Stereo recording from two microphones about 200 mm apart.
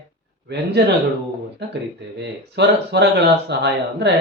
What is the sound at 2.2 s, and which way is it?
Speech, 60° right (ahead or behind).